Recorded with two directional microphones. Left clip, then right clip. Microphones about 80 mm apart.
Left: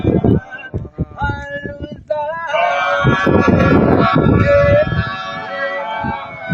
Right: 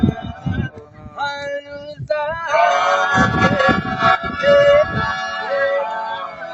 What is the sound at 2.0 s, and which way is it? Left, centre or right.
Music, right.